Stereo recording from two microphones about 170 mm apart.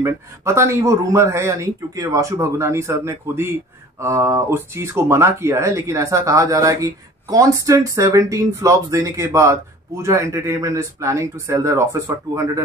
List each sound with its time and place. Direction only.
0.0 s speech: 15° right (ahead or behind)